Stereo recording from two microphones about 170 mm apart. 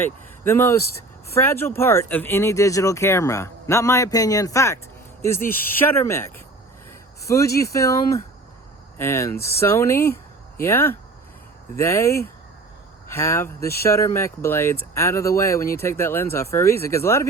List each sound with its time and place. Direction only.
0.0 s speech: 15° left (ahead or behind)
7.3 s speech: 20° left (ahead or behind)